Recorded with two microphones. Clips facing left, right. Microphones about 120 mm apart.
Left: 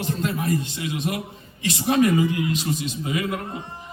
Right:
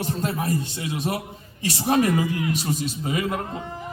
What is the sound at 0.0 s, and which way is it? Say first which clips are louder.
A man's voice: even; 35° right (ahead or behind).